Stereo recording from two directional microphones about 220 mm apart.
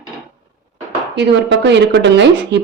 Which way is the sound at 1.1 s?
55° right (ahead or behind).